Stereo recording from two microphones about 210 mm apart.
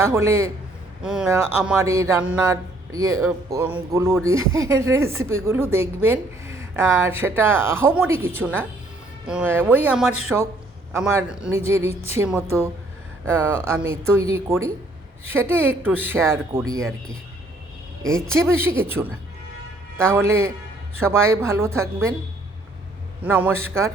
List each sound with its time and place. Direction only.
0.0 s speech: 15° right (ahead or behind)
1.0 s speech: 5° right (ahead or behind)
6.4 s a sound: 70° right (ahead or behind)
6.7 s speech: 10° right (ahead or behind)
18.0 s speech: 15° right (ahead or behind)
20.1 s speech: 10° right (ahead or behind)
23.2 s speech: 5° right (ahead or behind)